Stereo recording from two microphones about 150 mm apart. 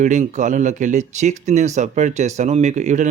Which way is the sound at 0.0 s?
55° right (ahead or behind).